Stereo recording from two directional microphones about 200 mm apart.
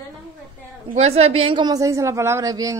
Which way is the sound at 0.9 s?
30° right (ahead or behind).